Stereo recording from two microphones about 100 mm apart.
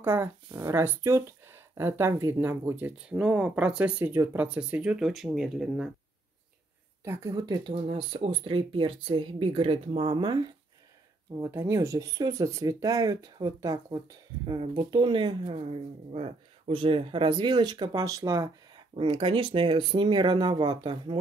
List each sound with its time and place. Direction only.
0.0 s speech: 25° right (ahead or behind)
4.0 s speech: 25° right (ahead or behind); by 5.9 s 5° right (ahead or behind)
7.2 s speech: 45° right (ahead or behind)
7.9 s speech: 60° right (ahead or behind); by 10.0 s 80° right
10.0 s speech: 45° right (ahead or behind)
11.3 s speech: 30° right (ahead or behind)
14.4 s speech: 55° right (ahead or behind)
15.4 s speech: 70° right (ahead or behind); by 18.5 s 35° right (ahead or behind)
18.9 s speech: 55° right (ahead or behind)